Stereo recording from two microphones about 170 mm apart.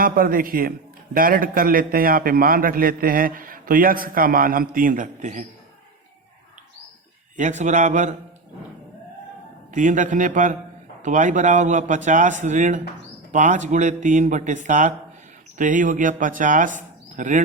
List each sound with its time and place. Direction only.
0.0 s a man's voice: 55° right (ahead or behind)
7.3 s speech: 45° right (ahead or behind)
9.7 s speech: 50° right (ahead or behind)